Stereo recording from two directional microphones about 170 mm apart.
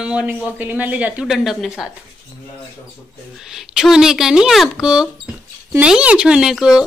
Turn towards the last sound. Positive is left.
turn(degrees=-5)  # may be behind; listen again after turning